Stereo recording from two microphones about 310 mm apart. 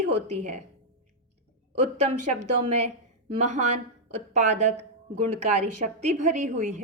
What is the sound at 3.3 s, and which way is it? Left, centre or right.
A woman's voice, right.